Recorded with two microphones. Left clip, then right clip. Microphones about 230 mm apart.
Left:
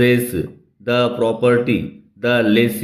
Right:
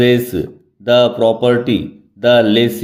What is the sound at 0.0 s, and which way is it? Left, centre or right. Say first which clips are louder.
Speech: right 3 dB; centre.